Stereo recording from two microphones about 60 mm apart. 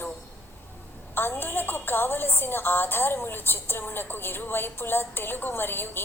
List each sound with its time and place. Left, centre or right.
1.1 s a woman's voice: left